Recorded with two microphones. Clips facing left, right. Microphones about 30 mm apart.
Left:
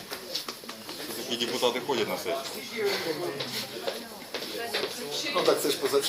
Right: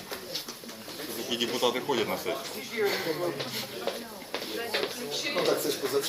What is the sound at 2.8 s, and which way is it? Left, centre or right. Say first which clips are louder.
Speech: even; left.